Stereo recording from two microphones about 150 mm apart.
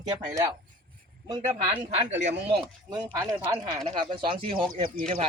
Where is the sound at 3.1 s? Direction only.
20° right (ahead or behind).